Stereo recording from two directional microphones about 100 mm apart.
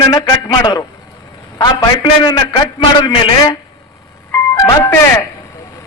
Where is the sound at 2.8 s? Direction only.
55° left (ahead or behind).